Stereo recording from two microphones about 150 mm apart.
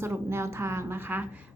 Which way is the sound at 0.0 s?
15° right (ahead or behind).